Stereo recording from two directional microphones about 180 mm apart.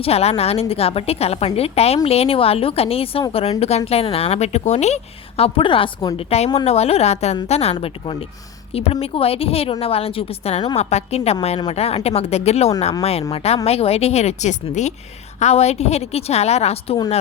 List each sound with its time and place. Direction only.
0.0 s a woman's voice: 35° left (ahead or behind)